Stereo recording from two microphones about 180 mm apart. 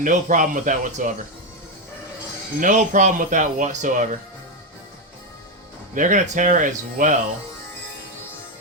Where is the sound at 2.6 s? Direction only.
45° right (ahead or behind).